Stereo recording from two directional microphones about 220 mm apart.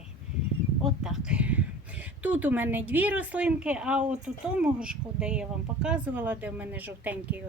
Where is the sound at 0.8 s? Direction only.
5° right (ahead or behind).